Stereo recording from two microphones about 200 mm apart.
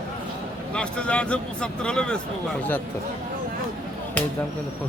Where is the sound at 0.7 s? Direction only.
5° left (ahead or behind).